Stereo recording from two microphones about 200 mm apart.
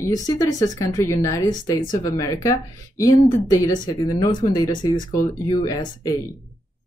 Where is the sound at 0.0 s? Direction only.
15° left (ahead or behind).